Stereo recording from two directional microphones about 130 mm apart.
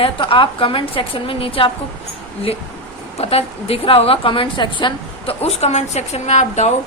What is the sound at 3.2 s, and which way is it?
A woman's voice, 50° left (ahead or behind).